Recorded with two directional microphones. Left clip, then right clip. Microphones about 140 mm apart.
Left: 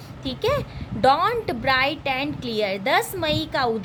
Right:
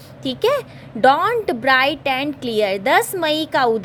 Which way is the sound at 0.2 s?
50° right (ahead or behind).